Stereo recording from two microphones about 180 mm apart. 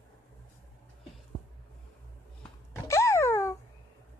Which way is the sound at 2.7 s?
15° left (ahead or behind).